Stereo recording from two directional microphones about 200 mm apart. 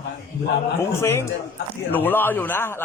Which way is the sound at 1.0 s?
15° left (ahead or behind).